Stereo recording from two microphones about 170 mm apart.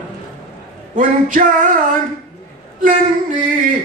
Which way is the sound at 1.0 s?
50° right (ahead or behind).